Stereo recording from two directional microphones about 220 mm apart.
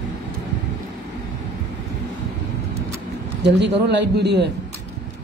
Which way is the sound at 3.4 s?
50° right (ahead or behind).